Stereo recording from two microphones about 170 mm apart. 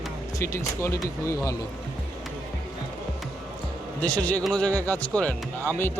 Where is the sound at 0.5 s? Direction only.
15° left (ahead or behind).